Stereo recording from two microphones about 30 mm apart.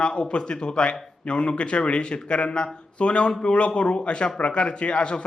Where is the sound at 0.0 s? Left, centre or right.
Left.